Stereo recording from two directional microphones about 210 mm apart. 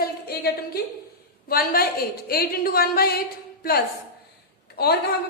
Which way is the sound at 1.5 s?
45° left (ahead or behind).